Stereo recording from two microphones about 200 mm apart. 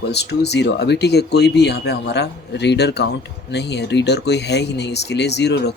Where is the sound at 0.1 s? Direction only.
55° left (ahead or behind).